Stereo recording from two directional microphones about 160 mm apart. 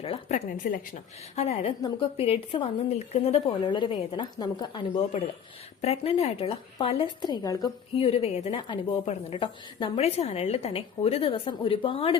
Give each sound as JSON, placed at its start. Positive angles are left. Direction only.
{"t": 0.0, "sound": "a woman's voice", "side_deg": 40}
{"t": 7.9, "sound": "a woman's voice", "side_deg": 35}